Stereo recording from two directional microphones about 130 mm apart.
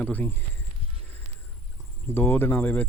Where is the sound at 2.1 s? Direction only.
15° left (ahead or behind).